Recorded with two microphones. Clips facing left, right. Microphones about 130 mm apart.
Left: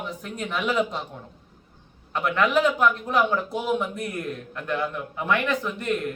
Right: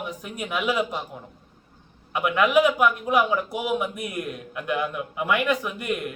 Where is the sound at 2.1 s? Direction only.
10° right (ahead or behind).